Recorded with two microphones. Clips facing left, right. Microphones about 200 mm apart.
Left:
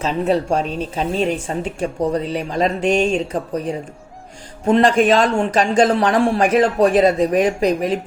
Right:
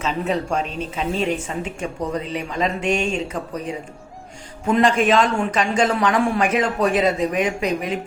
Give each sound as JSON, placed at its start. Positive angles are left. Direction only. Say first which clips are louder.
{"t": 0.0, "sound": "speech", "louder": "left 5 dB", "side_deg": 35}